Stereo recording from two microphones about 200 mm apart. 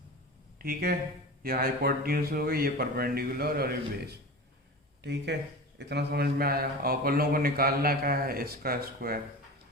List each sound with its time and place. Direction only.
0.6 s a man's voice: 50° right (ahead or behind)